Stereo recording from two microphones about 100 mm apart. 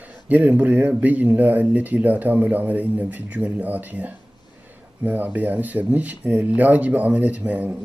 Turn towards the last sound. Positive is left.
turn(degrees=-15)  # may be behind; listen again after turning